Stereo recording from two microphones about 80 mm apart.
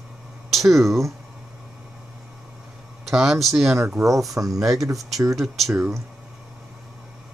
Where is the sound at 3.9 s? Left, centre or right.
Right.